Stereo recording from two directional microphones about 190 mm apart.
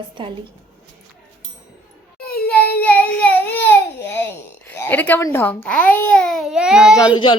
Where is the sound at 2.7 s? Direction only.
10° left (ahead or behind).